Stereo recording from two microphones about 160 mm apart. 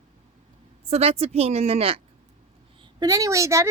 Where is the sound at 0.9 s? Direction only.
40° right (ahead or behind).